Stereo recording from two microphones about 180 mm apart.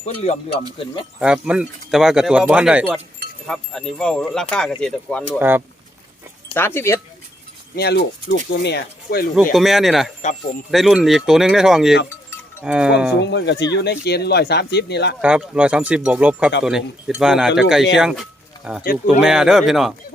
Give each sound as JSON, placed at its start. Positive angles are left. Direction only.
{"t": 0.0, "sound": "speech", "side_deg": 40}
{"t": 1.2, "sound": "speech", "side_deg": -5}
{"t": 5.4, "sound": "speech", "side_deg": -10}
{"t": 6.5, "sound": "speech", "side_deg": 10}
{"t": 7.8, "sound": "speech", "side_deg": 65}
{"t": 9.5, "sound": "speech", "side_deg": 0}
{"t": 13.1, "sound": "speech", "side_deg": 70}
{"t": 15.2, "sound": "speech", "side_deg": -5}